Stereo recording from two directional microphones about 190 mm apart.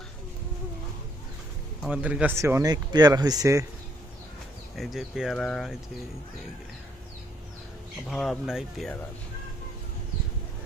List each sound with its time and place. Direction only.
1.8 s speech: 5° right (ahead or behind)
4.8 s speech: centre (ahead or behind)
8.1 s speech: centre (ahead or behind)